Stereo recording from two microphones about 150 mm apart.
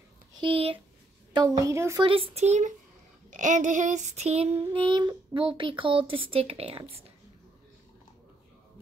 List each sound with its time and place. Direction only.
0.4 s speech: 35° right (ahead or behind)
1.3 s a woman's voice: 25° right (ahead or behind)
2.0 s a sound: 35° right (ahead or behind)
4.7 s speech: 30° right (ahead or behind)